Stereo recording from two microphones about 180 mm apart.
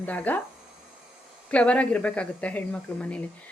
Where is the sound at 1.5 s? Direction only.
5° left (ahead or behind).